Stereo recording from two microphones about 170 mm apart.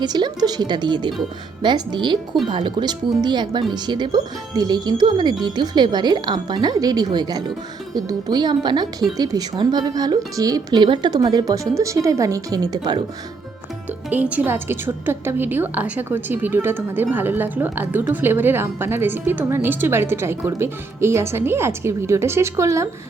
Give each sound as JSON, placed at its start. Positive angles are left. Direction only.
{"t": 0.0, "sound": "speech", "side_deg": -25}
{"t": 14.1, "sound": "a woman's voice", "side_deg": -10}